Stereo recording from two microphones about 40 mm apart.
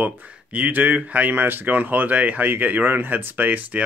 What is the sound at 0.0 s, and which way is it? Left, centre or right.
Speech, right.